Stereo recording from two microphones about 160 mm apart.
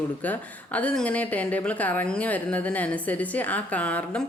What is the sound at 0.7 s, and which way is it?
A woman's voice, 10° left (ahead or behind).